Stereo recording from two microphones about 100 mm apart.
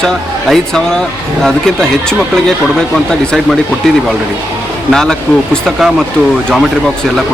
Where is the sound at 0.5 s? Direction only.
5° left (ahead or behind).